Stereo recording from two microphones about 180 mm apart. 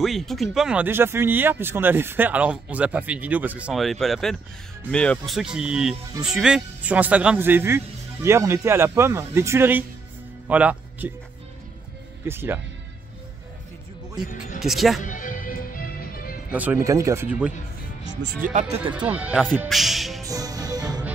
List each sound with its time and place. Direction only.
0.0 s speech: centre (ahead or behind)
12.3 s speech: 15° right (ahead or behind)
14.2 s speech: 45° left (ahead or behind)
14.6 s speech: centre (ahead or behind)
15.0 s music: 45° left (ahead or behind)
16.5 s speech: 10° right (ahead or behind)
18.0 s speech: 65° right (ahead or behind)
18.5 s speech: 40° right (ahead or behind)
19.0 s speech: 10° right (ahead or behind)
20.2 s music: 20° right (ahead or behind)